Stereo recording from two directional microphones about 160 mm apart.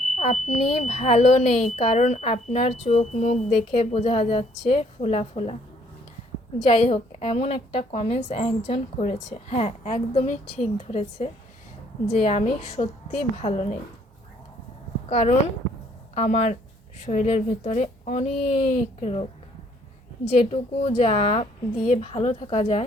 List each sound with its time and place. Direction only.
0.2 s a woman's voice: 45° left (ahead or behind)
6.7 s a woman's voice: 40° left (ahead or behind)
15.1 s a woman's voice: 40° left (ahead or behind)